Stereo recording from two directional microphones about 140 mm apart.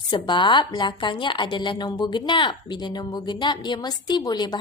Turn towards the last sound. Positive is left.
turn(degrees=30)  # may be behind; listen again after turning